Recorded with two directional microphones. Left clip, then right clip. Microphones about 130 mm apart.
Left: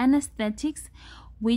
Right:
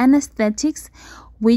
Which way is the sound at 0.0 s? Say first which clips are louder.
Right 8 dB; 30° right (ahead or behind).